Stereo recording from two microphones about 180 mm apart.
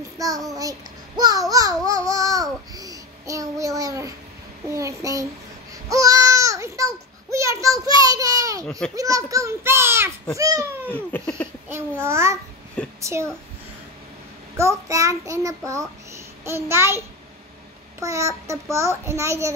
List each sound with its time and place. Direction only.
0.2 s a child's voice: 20° right (ahead or behind)
1.9 s babbling: 20° right (ahead or behind)
4.6 s a child's voice: 20° right (ahead or behind)
5.9 s a sound: 20° right (ahead or behind)
8.6 s a child's voice: 5° left (ahead or behind)
8.9 s a child's voice: 20° right (ahead or behind)
10.9 s laughter: 10° left (ahead or behind)
11.7 s a child's voice: 15° right (ahead or behind)
14.6 s a child's voice: 15° right (ahead or behind)
18.0 s a child's voice: 15° right (ahead or behind)